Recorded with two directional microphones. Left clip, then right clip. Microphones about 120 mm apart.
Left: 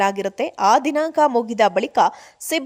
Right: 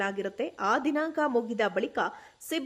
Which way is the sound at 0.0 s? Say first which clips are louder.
Left 11 dB; 45° left (ahead or behind).